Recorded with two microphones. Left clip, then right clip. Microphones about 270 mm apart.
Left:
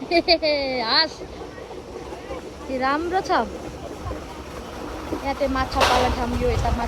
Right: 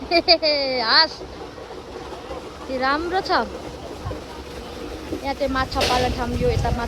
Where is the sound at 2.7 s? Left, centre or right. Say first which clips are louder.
Right 1 dB; centre.